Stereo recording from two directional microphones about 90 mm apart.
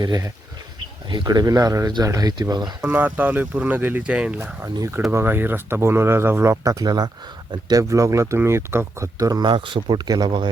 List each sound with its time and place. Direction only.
1.1 s speech: 55° right (ahead or behind)
2.8 s speech: 20° right (ahead or behind)
5.1 s speech: 25° right (ahead or behind)
9.1 s speech: 40° right (ahead or behind)
9.4 s speech: 65° right (ahead or behind)